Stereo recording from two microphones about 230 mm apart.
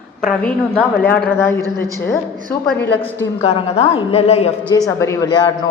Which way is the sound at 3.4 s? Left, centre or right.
Left.